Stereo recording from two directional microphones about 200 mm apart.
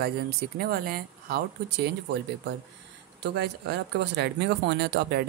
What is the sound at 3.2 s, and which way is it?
Speech, 60° right (ahead or behind).